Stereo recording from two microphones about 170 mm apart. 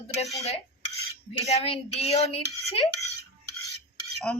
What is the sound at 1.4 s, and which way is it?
A woman's voice, 40° left (ahead or behind).